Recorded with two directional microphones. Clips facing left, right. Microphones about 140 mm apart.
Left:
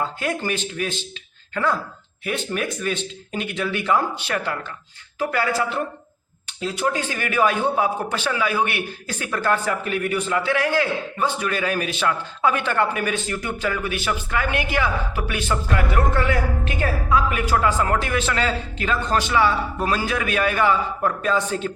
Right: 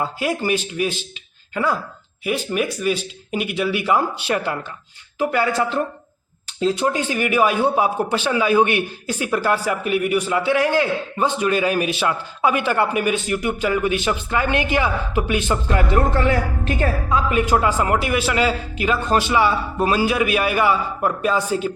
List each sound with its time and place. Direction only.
0.0 s a man's voice: 10° right (ahead or behind)
2.2 s a man's voice: 10° right (ahead or behind)
6.6 s speech: 30° right (ahead or behind)
6.9 s a man's voice: 20° right (ahead or behind)
17.2 s a man's voice: 20° right (ahead or behind)